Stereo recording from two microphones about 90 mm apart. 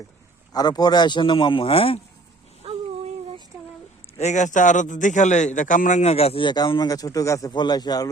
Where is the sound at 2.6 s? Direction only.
90° right.